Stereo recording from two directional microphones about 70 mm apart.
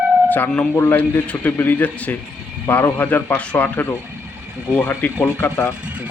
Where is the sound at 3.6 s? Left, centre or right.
Left.